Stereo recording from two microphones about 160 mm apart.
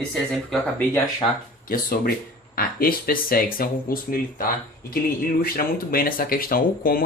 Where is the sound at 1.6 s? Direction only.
65° left (ahead or behind).